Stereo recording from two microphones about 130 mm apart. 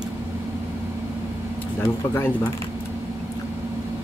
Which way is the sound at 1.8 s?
15° left (ahead or behind).